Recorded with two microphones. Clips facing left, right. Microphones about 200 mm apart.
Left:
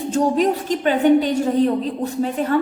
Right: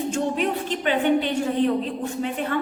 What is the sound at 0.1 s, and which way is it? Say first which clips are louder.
A woman's voice: left 10 dB; 35° left (ahead or behind).